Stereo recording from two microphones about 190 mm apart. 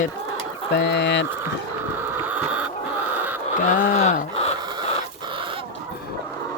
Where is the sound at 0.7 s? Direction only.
65° left (ahead or behind).